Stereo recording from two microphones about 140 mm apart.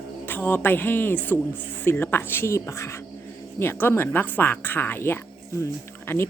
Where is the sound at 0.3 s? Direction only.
15° left (ahead or behind).